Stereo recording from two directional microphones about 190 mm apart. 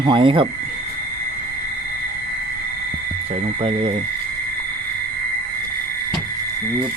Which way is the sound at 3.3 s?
30° right (ahead or behind).